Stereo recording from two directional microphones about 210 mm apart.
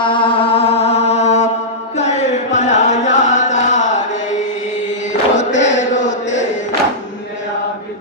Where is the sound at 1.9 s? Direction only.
35° left (ahead or behind).